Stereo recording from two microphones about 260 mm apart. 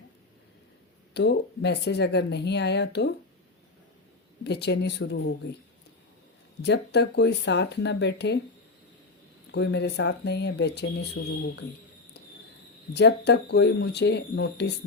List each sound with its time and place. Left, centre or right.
1.1 s speech: left
4.4 s speech: left
6.6 s speech: left
9.5 s speech: left
12.9 s speech: left